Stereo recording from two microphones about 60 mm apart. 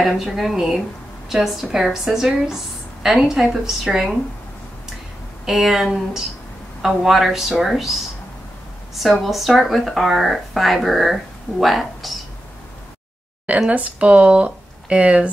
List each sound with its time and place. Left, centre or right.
0.0 s speech: centre
5.4 s speech: centre
13.7 s speech: right